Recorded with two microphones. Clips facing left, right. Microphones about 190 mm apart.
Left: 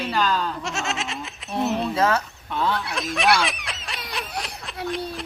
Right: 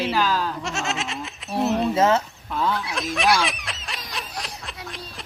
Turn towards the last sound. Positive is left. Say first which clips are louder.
# left 2 dB
turn(degrees=0)  # may be behind; listen again after turning